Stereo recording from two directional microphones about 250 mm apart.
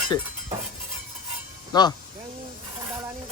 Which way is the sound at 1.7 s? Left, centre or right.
Centre.